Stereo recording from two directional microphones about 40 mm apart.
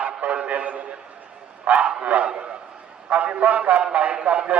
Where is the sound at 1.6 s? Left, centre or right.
Right.